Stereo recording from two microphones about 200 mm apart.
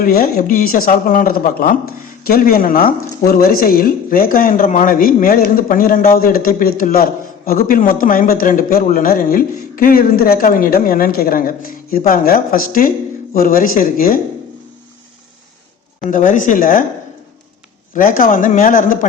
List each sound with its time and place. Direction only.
0.0 s a man's voice: 50° left (ahead or behind)
16.0 s a man's voice: 40° left (ahead or behind)
17.9 s a man's voice: 45° left (ahead or behind)